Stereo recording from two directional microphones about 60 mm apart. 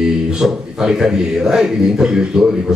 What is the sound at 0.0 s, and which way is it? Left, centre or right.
A man's voice, centre.